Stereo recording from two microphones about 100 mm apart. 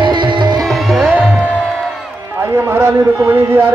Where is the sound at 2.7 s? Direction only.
25° right (ahead or behind).